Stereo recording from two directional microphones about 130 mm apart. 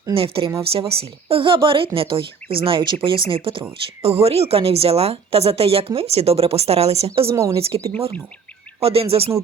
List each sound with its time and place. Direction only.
0.2 s a woman's voice: 45° right (ahead or behind)
7.3 s speech: 25° right (ahead or behind)
8.8 s a woman's voice: 50° right (ahead or behind)